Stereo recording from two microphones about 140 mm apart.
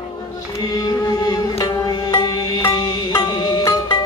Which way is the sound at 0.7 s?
30° left (ahead or behind).